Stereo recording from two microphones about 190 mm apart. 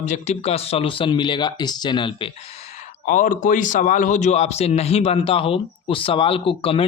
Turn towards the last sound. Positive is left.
turn(degrees=30)  # may be behind; listen again after turning